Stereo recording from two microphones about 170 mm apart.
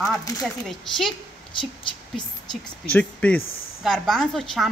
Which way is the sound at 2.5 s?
5° left (ahead or behind).